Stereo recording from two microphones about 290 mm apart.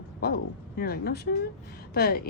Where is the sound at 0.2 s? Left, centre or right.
Left.